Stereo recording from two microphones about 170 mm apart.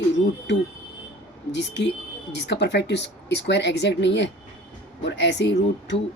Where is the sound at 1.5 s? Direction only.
90° left.